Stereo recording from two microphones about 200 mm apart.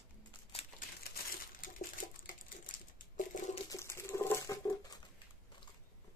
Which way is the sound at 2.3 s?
40° left (ahead or behind).